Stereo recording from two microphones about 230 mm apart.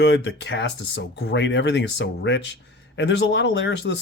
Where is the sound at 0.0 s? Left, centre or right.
Left.